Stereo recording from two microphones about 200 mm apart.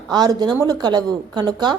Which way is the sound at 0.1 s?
20° right (ahead or behind).